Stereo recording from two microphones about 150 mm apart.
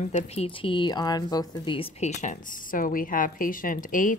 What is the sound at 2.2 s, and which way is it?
A woman's voice, 60° left (ahead or behind).